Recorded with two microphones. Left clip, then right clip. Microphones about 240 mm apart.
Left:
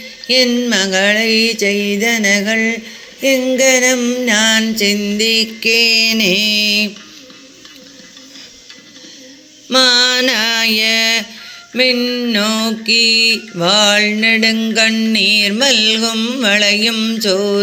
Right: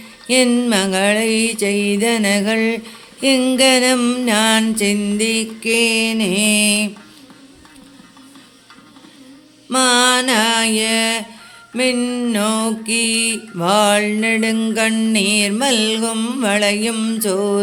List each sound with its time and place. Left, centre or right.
0.3 s music: centre
5.1 s mantra: centre
9.6 s a sound: centre
11.7 s mantra: centre